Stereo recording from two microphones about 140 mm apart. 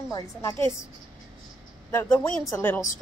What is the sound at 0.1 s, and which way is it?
Speech, 25° left (ahead or behind).